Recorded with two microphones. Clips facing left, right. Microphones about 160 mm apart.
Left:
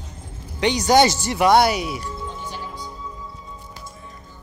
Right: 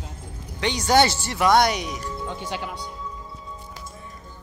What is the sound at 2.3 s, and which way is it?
Music, 75° right (ahead or behind).